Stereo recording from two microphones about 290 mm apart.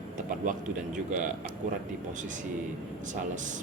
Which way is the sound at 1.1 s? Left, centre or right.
Right.